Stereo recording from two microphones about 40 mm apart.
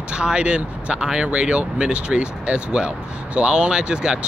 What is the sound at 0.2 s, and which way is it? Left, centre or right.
Speech, right.